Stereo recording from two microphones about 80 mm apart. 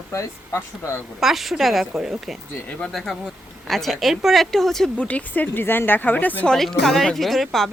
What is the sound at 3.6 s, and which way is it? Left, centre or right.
A woman's voice, centre.